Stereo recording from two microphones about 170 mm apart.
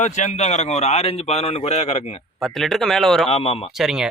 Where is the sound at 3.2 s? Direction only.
35° left (ahead or behind).